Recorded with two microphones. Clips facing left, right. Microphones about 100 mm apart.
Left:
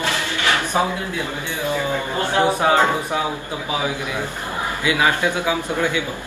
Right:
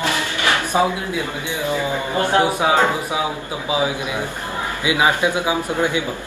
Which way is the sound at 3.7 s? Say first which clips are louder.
Right 3 dB; 15° right (ahead or behind).